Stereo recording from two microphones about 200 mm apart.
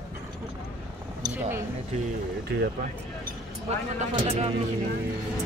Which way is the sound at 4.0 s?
30° right (ahead or behind).